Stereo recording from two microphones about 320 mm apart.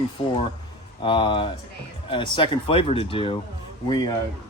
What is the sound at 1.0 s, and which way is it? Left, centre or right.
Speech, centre.